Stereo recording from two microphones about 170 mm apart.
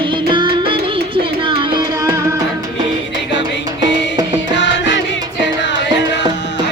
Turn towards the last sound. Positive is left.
turn(degrees=90)